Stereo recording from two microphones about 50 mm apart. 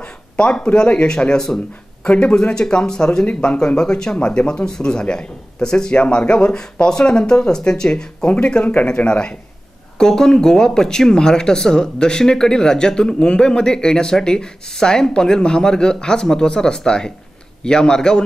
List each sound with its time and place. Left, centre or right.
0.0 s speech: centre
9.9 s speech: centre